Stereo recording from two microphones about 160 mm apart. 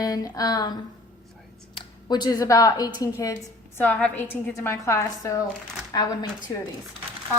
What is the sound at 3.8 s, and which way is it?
A woman's voice, 10° left (ahead or behind).